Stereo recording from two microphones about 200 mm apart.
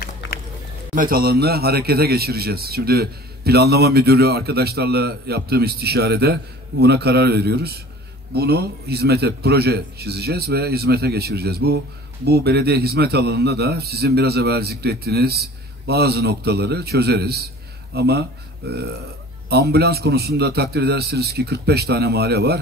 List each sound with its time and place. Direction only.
0.9 s a man's voice: 45° right (ahead or behind)